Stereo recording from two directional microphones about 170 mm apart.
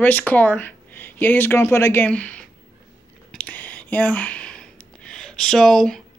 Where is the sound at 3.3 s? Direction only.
10° left (ahead or behind).